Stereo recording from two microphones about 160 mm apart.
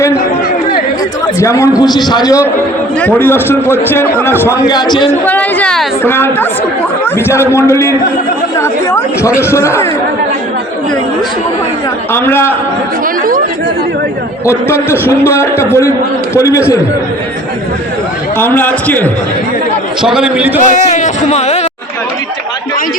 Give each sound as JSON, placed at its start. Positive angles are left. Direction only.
{"t": 1.4, "sound": "a man's voice", "side_deg": 20}
{"t": 3.0, "sound": "a man's voice", "side_deg": 10}
{"t": 5.2, "sound": "a man's voice", "side_deg": 10}
{"t": 12.1, "sound": "a man's voice", "side_deg": 15}
{"t": 14.4, "sound": "a man's voice", "side_deg": 15}
{"t": 18.3, "sound": "a man's voice", "side_deg": 10}
{"t": 20.0, "sound": "a man's voice", "side_deg": -5}
{"t": 20.6, "sound": "music", "side_deg": 50}